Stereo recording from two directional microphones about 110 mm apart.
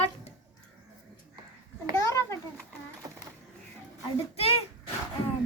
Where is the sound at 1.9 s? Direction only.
25° left (ahead or behind).